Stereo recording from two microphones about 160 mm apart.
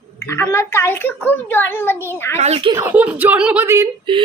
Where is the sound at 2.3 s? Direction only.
40° right (ahead or behind).